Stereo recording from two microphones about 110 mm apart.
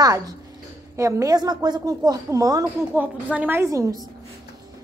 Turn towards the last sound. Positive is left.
turn(degrees=-30)  # may be behind; listen again after turning